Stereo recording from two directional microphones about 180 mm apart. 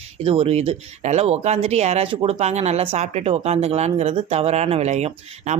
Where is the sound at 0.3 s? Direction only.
35° right (ahead or behind).